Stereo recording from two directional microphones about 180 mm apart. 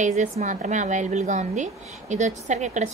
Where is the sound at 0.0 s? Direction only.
40° right (ahead or behind).